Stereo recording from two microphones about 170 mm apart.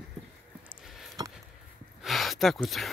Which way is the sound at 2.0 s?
Centre (ahead or behind).